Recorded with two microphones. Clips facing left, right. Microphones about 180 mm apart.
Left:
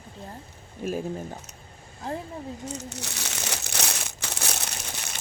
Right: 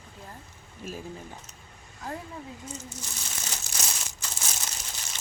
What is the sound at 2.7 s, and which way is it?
Crumpling, 70° left (ahead or behind).